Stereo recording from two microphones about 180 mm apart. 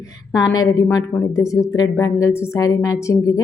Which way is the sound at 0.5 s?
20° left (ahead or behind).